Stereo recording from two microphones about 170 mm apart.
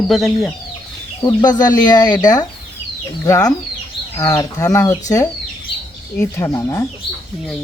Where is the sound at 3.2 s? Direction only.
20° left (ahead or behind).